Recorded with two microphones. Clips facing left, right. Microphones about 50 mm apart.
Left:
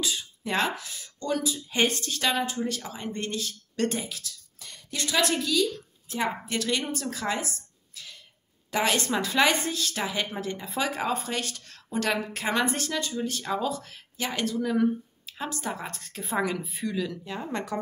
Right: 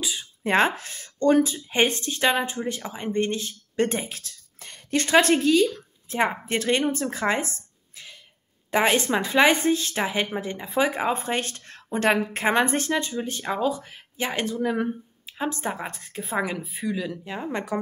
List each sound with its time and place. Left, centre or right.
0.0 s speech: centre
0.4 s speech: right
4.0 s a woman's voice: right
15.9 s speech: centre